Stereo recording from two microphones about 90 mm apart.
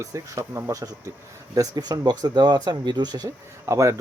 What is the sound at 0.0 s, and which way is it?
Speech, 35° right (ahead or behind).